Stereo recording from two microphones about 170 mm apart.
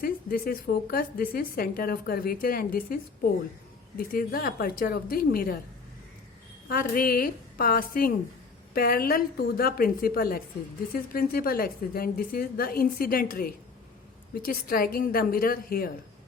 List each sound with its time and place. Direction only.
0.0 s a woman's voice: 60° left (ahead or behind)
6.7 s a woman's voice: 55° left (ahead or behind)